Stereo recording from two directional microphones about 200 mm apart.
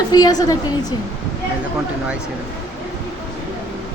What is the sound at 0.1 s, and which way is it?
Speech, 20° left (ahead or behind).